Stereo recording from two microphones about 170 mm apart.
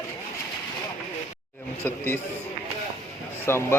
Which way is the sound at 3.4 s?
15° left (ahead or behind).